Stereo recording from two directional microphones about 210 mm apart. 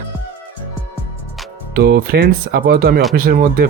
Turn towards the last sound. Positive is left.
turn(degrees=-45)  # may be behind; listen again after turning